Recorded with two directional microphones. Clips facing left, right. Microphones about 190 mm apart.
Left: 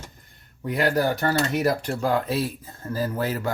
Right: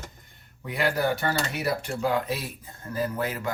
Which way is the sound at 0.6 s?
40° left (ahead or behind).